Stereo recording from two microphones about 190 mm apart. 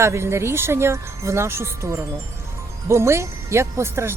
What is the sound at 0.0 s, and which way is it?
Speech, 15° right (ahead or behind).